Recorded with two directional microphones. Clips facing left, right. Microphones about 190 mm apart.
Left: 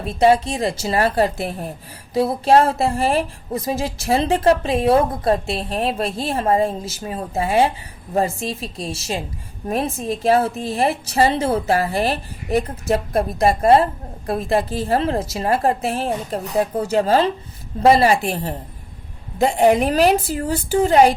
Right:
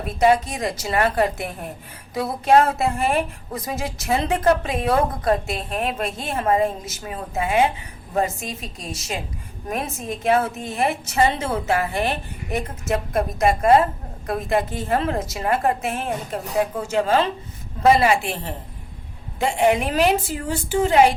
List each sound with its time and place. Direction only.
0.0 s a woman's voice: 30° left (ahead or behind)